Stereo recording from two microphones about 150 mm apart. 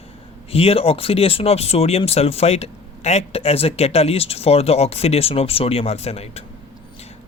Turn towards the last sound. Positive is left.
turn(degrees=45)  # may be behind; listen again after turning